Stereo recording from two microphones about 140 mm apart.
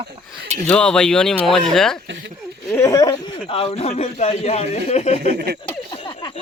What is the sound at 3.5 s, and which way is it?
Speech, 40° left (ahead or behind).